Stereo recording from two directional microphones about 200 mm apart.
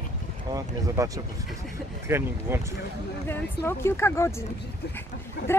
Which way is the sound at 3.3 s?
10° left (ahead or behind).